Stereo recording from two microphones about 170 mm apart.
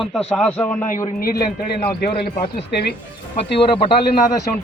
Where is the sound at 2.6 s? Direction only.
75° left (ahead or behind).